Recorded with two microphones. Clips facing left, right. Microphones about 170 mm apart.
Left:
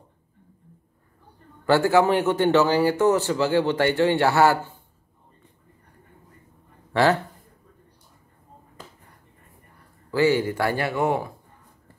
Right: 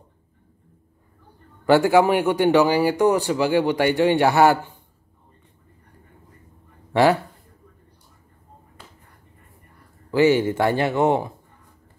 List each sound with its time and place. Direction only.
1.7 s a man's voice: 15° right (ahead or behind)
6.9 s speech: 15° right (ahead or behind)
10.1 s speech: 20° right (ahead or behind)